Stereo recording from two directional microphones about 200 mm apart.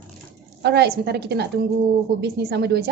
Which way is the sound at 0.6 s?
55° right (ahead or behind).